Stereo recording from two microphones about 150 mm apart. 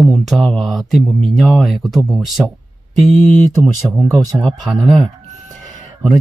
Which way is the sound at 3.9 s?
Centre (ahead or behind).